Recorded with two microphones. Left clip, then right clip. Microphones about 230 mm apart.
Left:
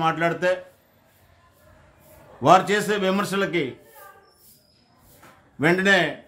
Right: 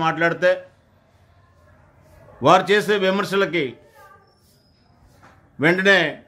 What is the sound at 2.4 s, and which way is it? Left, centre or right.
A man's voice, centre.